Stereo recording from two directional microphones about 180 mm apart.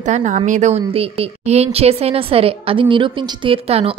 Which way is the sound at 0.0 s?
40° right (ahead or behind).